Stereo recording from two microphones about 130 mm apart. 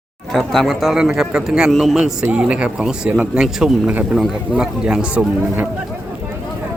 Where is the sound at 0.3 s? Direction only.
Centre (ahead or behind).